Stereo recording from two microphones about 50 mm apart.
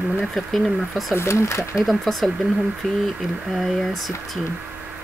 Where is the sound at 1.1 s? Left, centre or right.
Left.